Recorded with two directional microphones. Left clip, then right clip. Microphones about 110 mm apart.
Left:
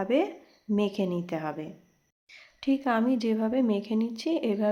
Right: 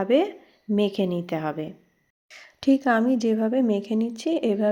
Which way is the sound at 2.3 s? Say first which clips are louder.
Right 7 dB; 50° right (ahead or behind).